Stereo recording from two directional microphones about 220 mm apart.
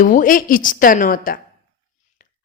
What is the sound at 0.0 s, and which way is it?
A woman's voice, 35° left (ahead or behind).